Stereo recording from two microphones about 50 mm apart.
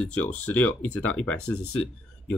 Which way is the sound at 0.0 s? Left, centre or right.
Left.